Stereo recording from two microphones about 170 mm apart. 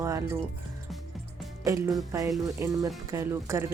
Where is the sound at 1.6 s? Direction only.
15° right (ahead or behind).